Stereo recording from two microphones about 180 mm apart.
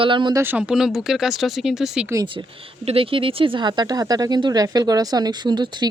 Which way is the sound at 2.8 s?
30° right (ahead or behind).